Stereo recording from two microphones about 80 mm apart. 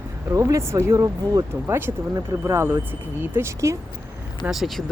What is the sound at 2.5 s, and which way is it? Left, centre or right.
Speech, right.